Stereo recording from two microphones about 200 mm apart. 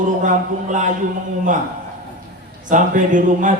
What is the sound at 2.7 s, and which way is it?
Speech, 40° right (ahead or behind).